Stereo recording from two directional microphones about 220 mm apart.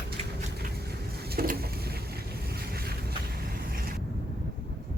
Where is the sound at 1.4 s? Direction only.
40° right (ahead or behind).